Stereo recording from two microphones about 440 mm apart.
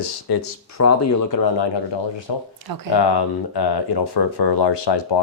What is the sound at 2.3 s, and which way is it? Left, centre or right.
Speech, left.